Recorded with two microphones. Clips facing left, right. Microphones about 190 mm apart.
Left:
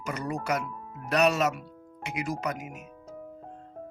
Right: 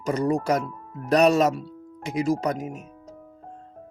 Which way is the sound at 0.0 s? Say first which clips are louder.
Right 9 dB; 35° right (ahead or behind).